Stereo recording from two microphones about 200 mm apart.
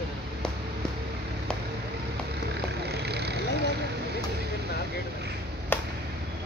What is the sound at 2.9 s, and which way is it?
Vehicle, 55° right (ahead or behind).